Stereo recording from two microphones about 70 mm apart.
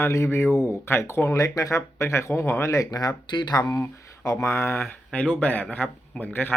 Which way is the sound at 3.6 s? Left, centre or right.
Left.